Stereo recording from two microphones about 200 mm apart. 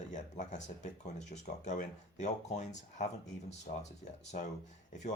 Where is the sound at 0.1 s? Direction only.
35° left (ahead or behind).